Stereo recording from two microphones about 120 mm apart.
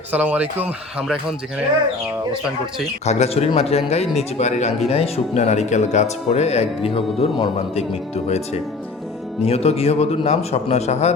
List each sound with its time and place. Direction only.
0.1 s speech: 10° right (ahead or behind)
3.1 s speech: 60° left (ahead or behind)
4.9 s speech: 55° left (ahead or behind)
9.4 s speech: 60° left (ahead or behind)